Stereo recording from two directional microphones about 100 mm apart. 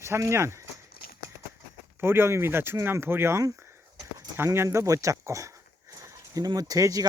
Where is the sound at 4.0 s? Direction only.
30° right (ahead or behind).